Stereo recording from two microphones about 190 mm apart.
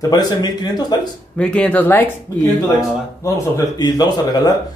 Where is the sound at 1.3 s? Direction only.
5° left (ahead or behind).